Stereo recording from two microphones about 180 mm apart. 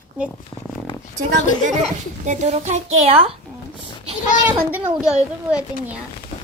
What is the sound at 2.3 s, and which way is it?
A child's voice, 40° right (ahead or behind).